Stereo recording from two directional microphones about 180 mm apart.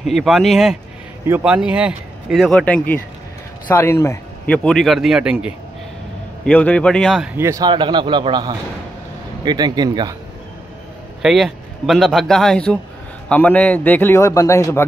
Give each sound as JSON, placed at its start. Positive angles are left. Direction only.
{"t": 0.0, "sound": "speech", "side_deg": 0}
{"t": 4.6, "sound": "speech", "side_deg": 0}
{"t": 6.4, "sound": "speech", "side_deg": 5}
{"t": 7.3, "sound": "a man's voice", "side_deg": -15}
{"t": 11.2, "sound": "a man's voice", "side_deg": 0}